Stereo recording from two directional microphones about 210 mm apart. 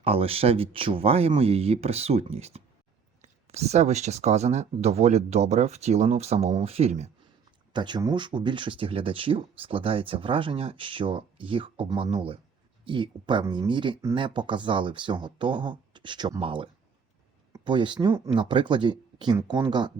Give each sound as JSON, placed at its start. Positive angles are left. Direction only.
{"t": 0.0, "sound": "speech", "side_deg": -25}
{"t": 17.5, "sound": "a sound", "side_deg": -20}
{"t": 18.3, "sound": "speech", "side_deg": -25}